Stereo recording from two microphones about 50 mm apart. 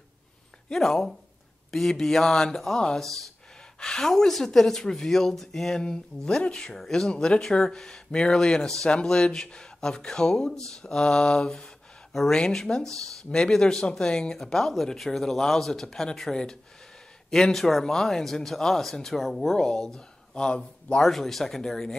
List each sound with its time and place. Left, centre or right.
0.7 s speech: centre
12.4 s speech: centre
21.0 s speech: centre